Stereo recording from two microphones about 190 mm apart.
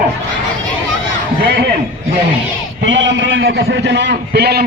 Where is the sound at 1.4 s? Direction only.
60° right (ahead or behind).